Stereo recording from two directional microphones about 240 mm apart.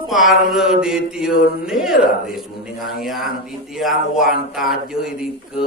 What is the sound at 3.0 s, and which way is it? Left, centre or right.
A man's voice, centre.